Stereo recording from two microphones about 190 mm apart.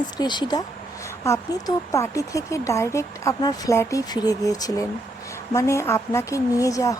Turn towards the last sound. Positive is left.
turn(degrees=15)  # may be behind; listen again after turning